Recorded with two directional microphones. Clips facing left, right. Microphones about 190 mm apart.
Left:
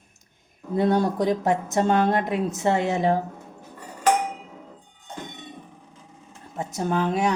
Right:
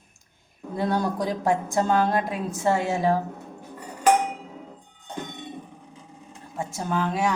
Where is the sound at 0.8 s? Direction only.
25° left (ahead or behind).